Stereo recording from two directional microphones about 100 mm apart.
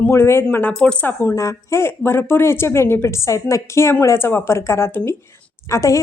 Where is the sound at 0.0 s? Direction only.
25° left (ahead or behind).